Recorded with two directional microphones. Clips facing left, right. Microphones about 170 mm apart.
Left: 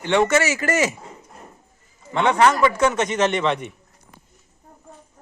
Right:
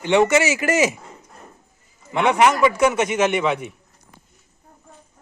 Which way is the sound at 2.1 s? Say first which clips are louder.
Even; 15° right (ahead or behind).